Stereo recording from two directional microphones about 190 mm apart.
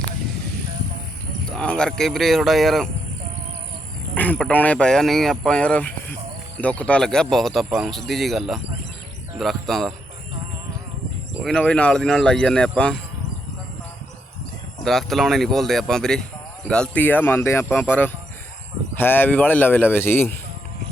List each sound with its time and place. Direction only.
1.5 s speech: 5° left (ahead or behind)
4.1 s speech: 5° left (ahead or behind)
11.4 s speech: 5° left (ahead or behind)
14.8 s speech: centre (ahead or behind)